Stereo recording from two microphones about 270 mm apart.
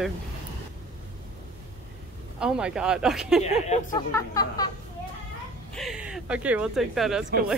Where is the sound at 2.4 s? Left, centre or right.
Centre.